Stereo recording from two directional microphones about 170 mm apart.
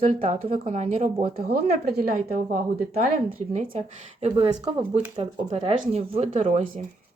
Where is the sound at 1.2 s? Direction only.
65° right (ahead or behind); by 6.8 s 35° right (ahead or behind).